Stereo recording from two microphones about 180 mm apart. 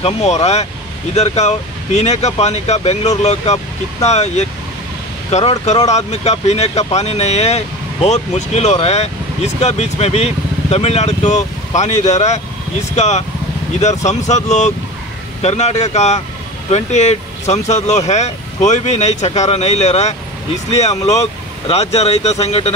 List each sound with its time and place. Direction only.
0.0 s speech: 35° left (ahead or behind)